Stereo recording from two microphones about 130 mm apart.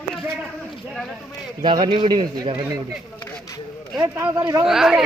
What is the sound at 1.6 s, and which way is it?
A man's voice, 40° right (ahead or behind).